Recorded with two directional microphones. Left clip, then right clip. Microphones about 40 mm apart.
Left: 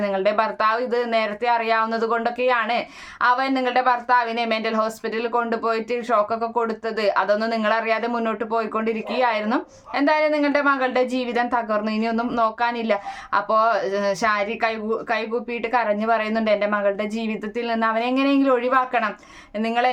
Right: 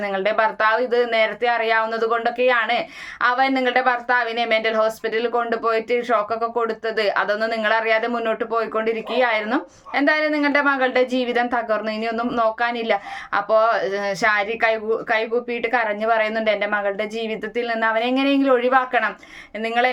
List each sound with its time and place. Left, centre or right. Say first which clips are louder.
0.0 s speech: right 1 dB; left